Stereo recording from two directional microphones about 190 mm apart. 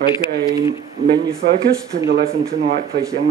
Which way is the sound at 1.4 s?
60° right (ahead or behind).